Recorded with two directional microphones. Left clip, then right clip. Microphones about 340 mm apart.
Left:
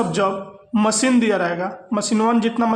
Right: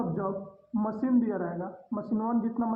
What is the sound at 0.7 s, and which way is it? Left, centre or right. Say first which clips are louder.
Speech: left 11 dB; left.